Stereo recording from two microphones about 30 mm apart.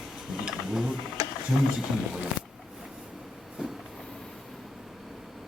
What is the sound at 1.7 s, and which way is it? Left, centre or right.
Speech, right.